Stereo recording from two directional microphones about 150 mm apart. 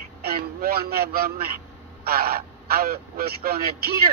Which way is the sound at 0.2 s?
85° right.